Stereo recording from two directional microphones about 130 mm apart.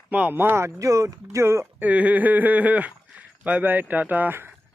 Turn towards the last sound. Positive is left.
turn(degrees=-15)  # may be behind; listen again after turning